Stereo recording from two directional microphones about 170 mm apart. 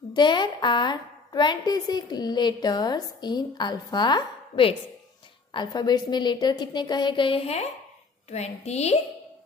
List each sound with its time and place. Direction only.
0.1 s a woman's voice: 25° left (ahead or behind)